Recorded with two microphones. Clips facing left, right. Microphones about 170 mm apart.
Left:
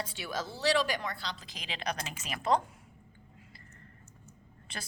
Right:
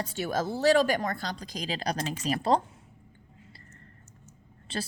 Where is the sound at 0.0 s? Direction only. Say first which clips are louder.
Right 7 dB; 45° right (ahead or behind).